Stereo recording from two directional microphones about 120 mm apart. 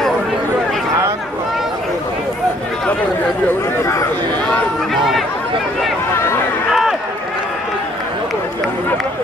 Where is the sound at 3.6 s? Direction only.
25° left (ahead or behind).